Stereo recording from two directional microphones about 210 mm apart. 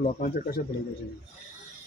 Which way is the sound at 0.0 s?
45° left (ahead or behind).